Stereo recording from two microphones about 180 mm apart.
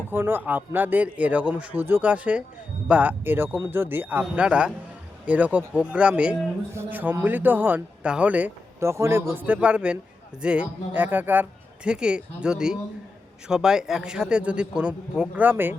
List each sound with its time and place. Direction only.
0.1 s a man's voice: 10° right (ahead or behind)